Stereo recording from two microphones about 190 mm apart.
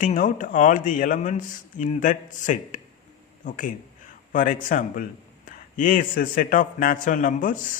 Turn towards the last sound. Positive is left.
turn(degrees=45)  # may be behind; listen again after turning